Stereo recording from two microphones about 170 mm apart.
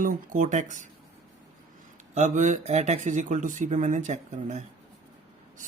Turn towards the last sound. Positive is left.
turn(degrees=-45)  # may be behind; listen again after turning